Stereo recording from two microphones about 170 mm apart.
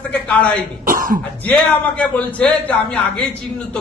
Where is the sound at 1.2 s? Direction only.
10° left (ahead or behind).